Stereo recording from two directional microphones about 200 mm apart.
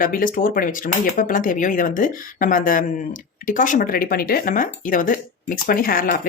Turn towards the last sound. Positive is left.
turn(degrees=45)  # may be behind; listen again after turning